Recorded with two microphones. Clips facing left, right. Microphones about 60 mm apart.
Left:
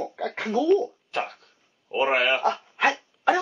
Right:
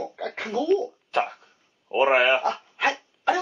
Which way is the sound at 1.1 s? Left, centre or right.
Centre.